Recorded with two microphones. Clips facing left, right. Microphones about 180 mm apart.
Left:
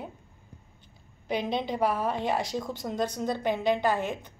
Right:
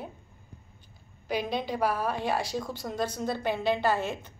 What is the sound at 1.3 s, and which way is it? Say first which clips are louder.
A woman's voice: left 1 dB; 20° left (ahead or behind).